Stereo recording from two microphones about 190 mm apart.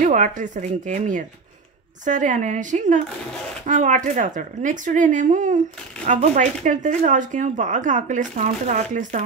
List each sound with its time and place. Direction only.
0.0 s speech: 40° right (ahead or behind)